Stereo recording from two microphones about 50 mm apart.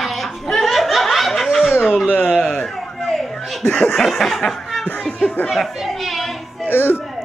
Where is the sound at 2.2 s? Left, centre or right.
Centre.